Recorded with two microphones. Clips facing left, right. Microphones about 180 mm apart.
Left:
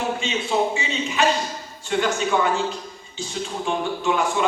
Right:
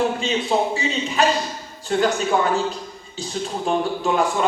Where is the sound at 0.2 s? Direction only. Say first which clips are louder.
Right 2 dB; 35° right (ahead or behind).